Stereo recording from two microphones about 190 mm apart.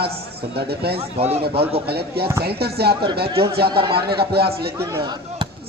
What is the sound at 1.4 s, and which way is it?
A man's voice, 55° right (ahead or behind).